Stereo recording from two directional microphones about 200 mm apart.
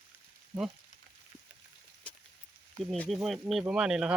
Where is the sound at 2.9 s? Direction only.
Centre (ahead or behind).